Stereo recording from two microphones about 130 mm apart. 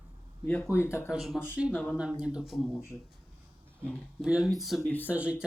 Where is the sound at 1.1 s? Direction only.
Centre (ahead or behind).